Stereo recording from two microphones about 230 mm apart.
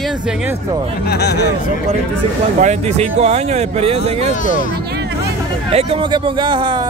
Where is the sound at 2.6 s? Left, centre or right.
Right.